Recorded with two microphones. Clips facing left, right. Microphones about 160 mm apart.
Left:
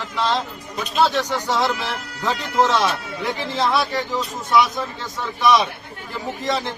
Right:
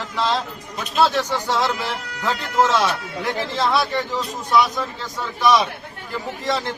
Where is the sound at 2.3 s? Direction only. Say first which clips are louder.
Even; centre (ahead or behind).